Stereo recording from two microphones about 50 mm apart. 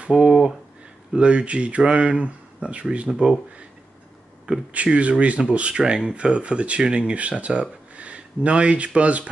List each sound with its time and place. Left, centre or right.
0.0 s speech: right
0.3 s speech: centre
1.1 s speech: right
4.7 s speech: right